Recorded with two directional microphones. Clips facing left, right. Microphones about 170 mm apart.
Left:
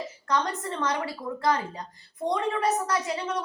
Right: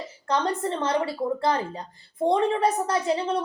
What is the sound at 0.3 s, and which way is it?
A woman's voice, 30° right (ahead or behind).